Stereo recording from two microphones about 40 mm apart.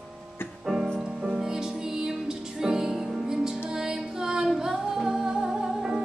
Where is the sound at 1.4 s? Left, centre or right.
Centre.